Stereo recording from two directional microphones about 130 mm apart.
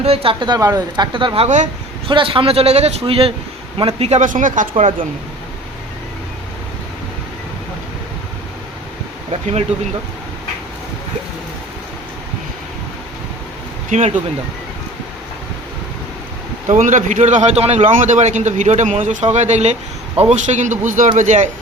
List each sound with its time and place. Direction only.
0.0 s a man's voice: 50° right (ahead or behind)
4.2 s speech: 85° right
4.7 s a man's voice: 45° right (ahead or behind)
9.3 s a man's voice: 50° right (ahead or behind)
16.6 s a man's voice: 75° right (ahead or behind)
21.2 s a man's voice: 65° right (ahead or behind)